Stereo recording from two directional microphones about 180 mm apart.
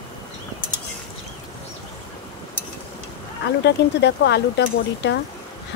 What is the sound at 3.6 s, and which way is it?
Speech, 70° left (ahead or behind).